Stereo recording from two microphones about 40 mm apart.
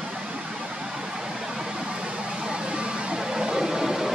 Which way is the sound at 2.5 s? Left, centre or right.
Right.